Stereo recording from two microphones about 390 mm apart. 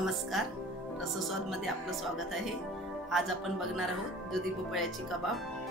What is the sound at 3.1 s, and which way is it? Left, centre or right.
Speech, centre.